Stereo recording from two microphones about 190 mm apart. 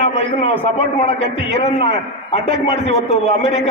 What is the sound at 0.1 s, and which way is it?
A man's voice, 35° left (ahead or behind).